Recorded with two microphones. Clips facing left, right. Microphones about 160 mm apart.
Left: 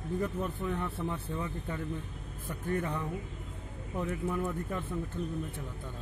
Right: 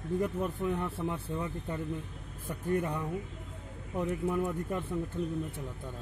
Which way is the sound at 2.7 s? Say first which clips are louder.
Right 2 dB; 10° right (ahead or behind).